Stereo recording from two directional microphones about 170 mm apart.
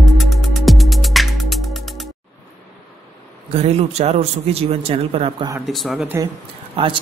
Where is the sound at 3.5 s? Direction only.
35° right (ahead or behind).